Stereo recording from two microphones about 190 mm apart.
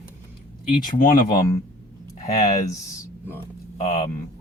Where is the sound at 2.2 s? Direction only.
20° left (ahead or behind).